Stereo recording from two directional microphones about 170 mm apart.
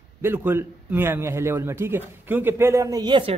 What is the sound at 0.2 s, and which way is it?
A man's voice, 10° right (ahead or behind).